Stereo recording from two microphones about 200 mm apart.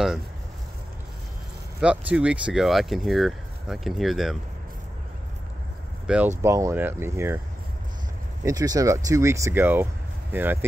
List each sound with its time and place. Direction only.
1.8 s speech: 5° right (ahead or behind)
6.0 s speech: 10° right (ahead or behind)
8.5 s speech: 20° right (ahead or behind)